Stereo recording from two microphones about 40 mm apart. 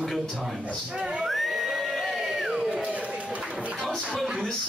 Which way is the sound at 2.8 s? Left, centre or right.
Right.